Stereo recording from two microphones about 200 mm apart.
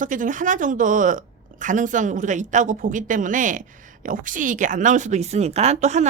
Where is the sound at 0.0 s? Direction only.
40° right (ahead or behind).